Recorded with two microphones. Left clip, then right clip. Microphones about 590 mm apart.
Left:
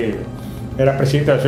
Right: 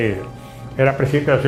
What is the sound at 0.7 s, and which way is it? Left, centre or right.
Speech, right.